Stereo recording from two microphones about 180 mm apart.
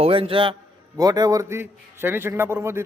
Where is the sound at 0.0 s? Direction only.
30° right (ahead or behind).